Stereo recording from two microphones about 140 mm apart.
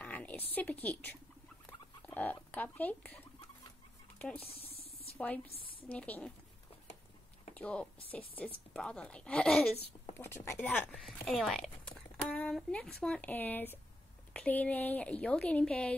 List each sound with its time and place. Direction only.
0.0 s a woman's voice: 10° left (ahead or behind)
1.7 s rodents: 15° left (ahead or behind)
2.5 s speech: 10° left (ahead or behind)
4.2 s speech: 10° left (ahead or behind)
7.5 s a woman's voice: 10° left (ahead or behind)
10.1 s a woman's voice: 15° left (ahead or behind)